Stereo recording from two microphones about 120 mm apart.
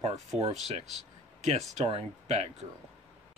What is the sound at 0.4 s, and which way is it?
Speech, 60° right (ahead or behind).